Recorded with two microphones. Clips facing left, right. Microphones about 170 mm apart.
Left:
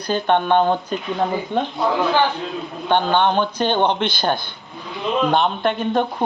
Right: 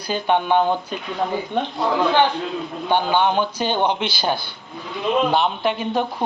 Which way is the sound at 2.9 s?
10° right (ahead or behind).